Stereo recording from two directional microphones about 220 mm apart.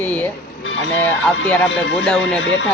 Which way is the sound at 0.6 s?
60° left (ahead or behind).